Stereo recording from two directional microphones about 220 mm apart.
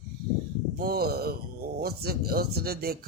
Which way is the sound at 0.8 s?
45° right (ahead or behind).